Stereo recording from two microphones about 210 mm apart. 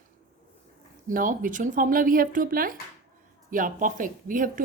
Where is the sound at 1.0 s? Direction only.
40° right (ahead or behind).